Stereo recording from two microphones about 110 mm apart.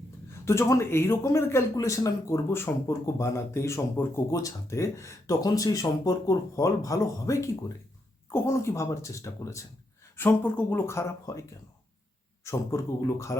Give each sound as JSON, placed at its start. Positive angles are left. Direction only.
{"t": 0.3, "sound": "speech", "side_deg": 25}
{"t": 12.5, "sound": "speech", "side_deg": 25}